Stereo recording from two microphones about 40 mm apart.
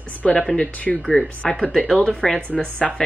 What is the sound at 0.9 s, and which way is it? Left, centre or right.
Speech, centre.